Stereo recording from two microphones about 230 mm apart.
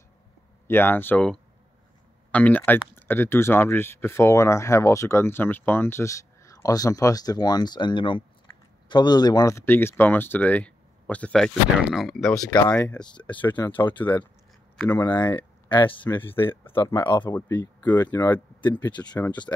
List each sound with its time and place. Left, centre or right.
0.7 s speech: centre
12.4 s speech: centre
15.1 s speech: centre
16.2 s speech: centre